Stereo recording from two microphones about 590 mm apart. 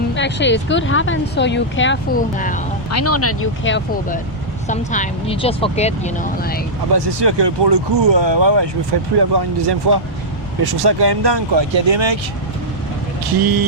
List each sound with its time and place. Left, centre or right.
0.1 s speech: centre
2.9 s speech: left
6.9 s speech: right
13.4 s speech: right